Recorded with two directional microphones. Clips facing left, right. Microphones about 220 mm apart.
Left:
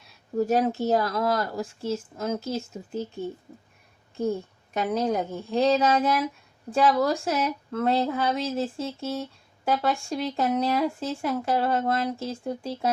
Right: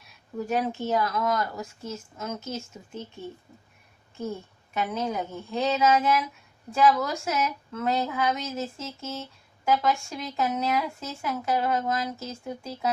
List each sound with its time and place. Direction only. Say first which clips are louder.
0.3 s speech: left 5 dB; 40° left (ahead or behind)
4.7 s speech: left 4 dB; 35° left (ahead or behind)